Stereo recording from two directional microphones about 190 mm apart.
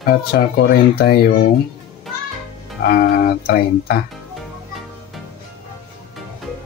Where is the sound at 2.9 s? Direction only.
50° left (ahead or behind).